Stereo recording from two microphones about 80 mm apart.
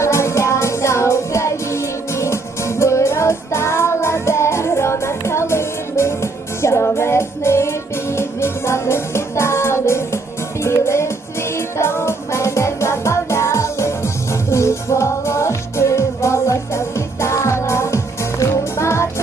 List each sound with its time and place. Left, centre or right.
0.0 s music: left